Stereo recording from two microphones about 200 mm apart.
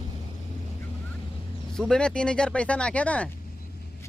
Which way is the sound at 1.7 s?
5° left (ahead or behind).